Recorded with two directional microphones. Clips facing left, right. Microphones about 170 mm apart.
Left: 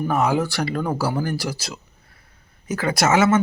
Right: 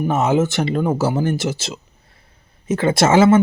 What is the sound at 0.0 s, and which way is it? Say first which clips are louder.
Speech: right 3 dB; 25° right (ahead or behind).